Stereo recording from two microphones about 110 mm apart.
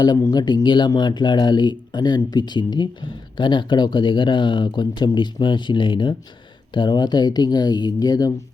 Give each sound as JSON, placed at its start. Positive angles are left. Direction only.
{"t": 0.2, "sound": "speech", "side_deg": 35}